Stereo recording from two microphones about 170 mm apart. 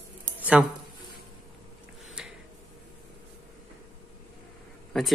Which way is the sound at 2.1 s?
5° right (ahead or behind).